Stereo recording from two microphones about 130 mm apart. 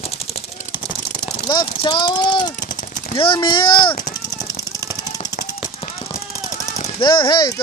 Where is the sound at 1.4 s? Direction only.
35° left (ahead or behind).